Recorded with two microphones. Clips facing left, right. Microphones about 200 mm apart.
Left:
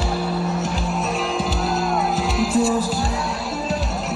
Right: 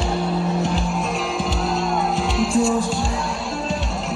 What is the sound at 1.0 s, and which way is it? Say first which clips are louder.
Music: left 1 dB; centre (ahead or behind).